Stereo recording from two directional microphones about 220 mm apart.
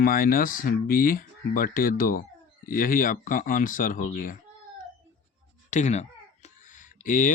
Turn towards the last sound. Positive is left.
turn(degrees=35)  # may be behind; listen again after turning